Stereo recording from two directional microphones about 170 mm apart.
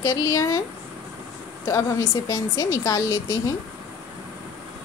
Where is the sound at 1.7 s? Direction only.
20° left (ahead or behind).